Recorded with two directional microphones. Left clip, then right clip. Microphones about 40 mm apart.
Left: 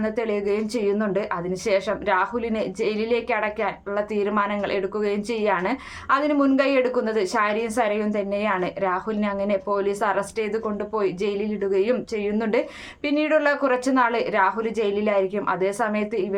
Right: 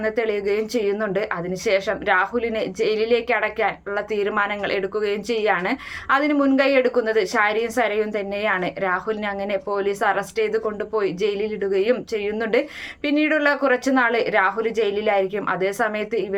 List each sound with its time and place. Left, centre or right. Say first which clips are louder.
0.0 s a woman's voice: right 2 dB; centre
6.3 s speech: right 1 dB; left
6.6 s a woman's voice: right 3 dB; left